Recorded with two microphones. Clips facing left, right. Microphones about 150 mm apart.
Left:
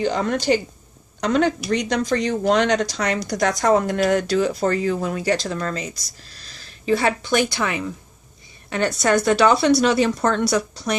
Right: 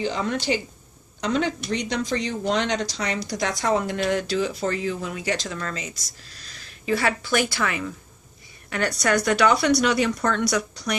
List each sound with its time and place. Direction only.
0.0 s speech: 50° left (ahead or behind); by 5.9 s 35° left (ahead or behind)
6.6 s a woman's voice: 25° left (ahead or behind)